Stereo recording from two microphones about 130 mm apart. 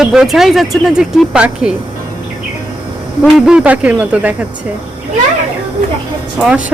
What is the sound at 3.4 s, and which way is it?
Speech, 5° right (ahead or behind).